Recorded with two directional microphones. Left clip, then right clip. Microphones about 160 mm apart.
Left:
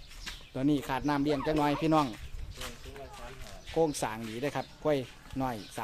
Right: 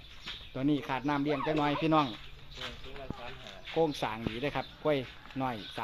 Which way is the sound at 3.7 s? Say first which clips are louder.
Left 1 dB; 10° left (ahead or behind).